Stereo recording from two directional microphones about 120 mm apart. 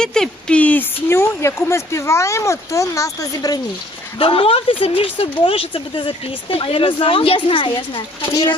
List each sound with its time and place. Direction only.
0.0 s speech: 5° left (ahead or behind); by 3.6 s 30° left (ahead or behind)
4.2 s speech: 50° left (ahead or behind)